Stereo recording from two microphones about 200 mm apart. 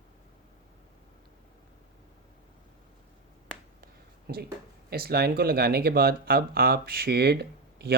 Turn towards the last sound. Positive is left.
turn(degrees=-55)  # may be behind; listen again after turning